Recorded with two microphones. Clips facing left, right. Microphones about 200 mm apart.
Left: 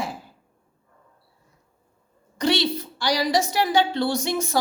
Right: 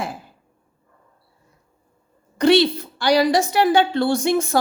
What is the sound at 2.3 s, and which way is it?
A woman's voice, 55° right (ahead or behind).